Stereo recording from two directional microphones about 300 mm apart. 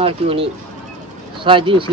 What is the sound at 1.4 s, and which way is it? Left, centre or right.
Speech, centre.